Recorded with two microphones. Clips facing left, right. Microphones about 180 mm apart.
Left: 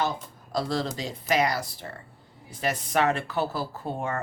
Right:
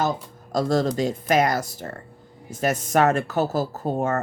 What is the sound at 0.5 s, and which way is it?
Speech, 45° right (ahead or behind).